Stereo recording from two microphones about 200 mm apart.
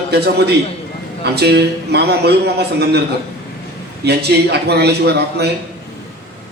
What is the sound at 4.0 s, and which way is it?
A man's voice, 55° right (ahead or behind).